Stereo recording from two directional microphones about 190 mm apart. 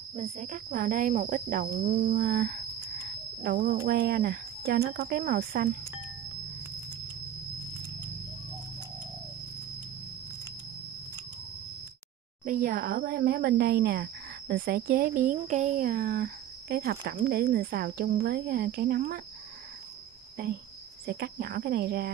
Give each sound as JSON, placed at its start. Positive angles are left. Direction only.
{"t": 0.1, "sound": "speech", "side_deg": -35}
{"t": 12.4, "sound": "speech", "side_deg": -45}
{"t": 21.0, "sound": "speech", "side_deg": -55}